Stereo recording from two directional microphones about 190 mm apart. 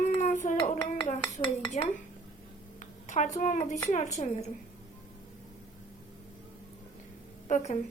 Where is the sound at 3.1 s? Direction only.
40° left (ahead or behind).